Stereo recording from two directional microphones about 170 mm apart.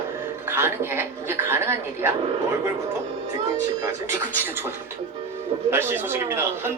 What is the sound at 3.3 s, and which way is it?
A man's voice, 15° right (ahead or behind).